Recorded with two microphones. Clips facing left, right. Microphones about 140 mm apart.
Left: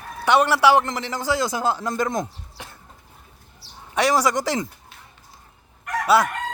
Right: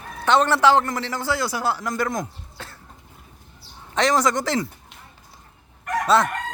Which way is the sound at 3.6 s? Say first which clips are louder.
Left 1 dB; 80° left.